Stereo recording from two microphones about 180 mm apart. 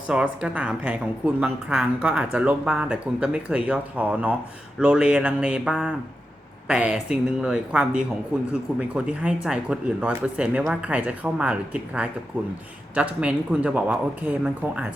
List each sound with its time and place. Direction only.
0.1 s a woman's voice: 5° right (ahead or behind)